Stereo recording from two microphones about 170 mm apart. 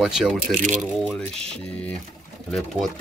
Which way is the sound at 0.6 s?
45° right (ahead or behind).